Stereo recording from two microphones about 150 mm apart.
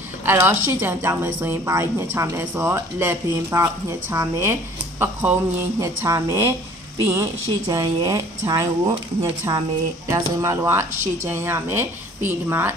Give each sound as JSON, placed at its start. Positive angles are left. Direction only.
{"t": 0.2, "sound": "a woman's voice", "side_deg": -15}